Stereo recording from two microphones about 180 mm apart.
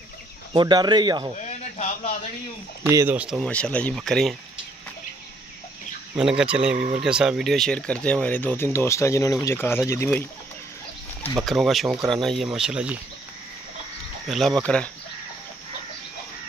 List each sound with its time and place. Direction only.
0.5 s speech: 25° right (ahead or behind)
1.4 s a sound: 40° left (ahead or behind)
2.8 s speech: 15° right (ahead or behind)
3.4 s speech: 5° left (ahead or behind)
6.1 s speech: 5° right (ahead or behind); by 10.2 s 15° left (ahead or behind)
11.4 s speech: centre (ahead or behind)
14.2 s speech: centre (ahead or behind)